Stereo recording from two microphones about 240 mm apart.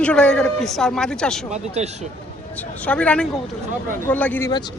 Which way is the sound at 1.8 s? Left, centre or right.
Right.